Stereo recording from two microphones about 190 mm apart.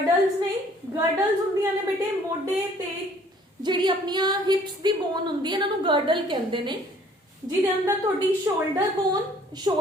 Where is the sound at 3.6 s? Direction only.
25° right (ahead or behind).